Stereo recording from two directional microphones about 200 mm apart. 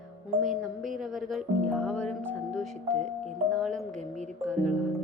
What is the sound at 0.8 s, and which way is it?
Music, 40° right (ahead or behind).